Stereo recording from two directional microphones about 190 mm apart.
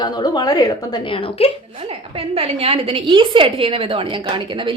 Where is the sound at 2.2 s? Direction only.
30° right (ahead or behind).